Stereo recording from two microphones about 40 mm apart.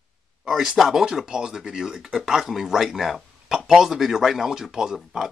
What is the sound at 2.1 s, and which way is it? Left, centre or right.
Speech, centre.